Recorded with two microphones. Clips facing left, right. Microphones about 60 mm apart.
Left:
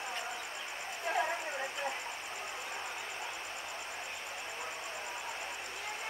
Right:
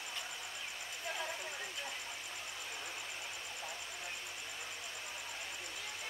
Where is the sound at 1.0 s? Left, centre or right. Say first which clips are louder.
Left 9 dB; left.